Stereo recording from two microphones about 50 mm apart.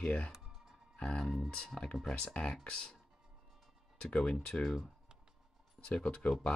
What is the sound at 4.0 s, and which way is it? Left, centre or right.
Speech, centre.